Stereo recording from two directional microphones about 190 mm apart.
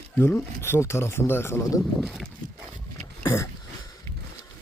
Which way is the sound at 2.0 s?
Centre (ahead or behind).